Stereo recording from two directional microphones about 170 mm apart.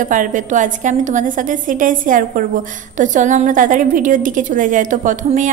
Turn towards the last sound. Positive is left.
turn(degrees=-50)  # may be behind; listen again after turning